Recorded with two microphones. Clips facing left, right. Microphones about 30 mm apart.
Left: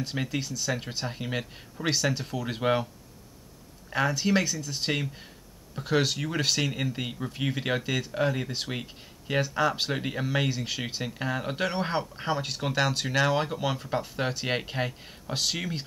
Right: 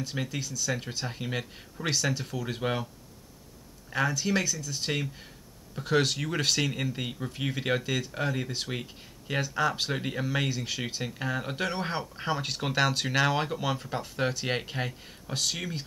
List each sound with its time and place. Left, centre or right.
0.1 s speech: centre
0.4 s speech: left
0.7 s speech: centre
4.1 s speech: centre
5.8 s speech: centre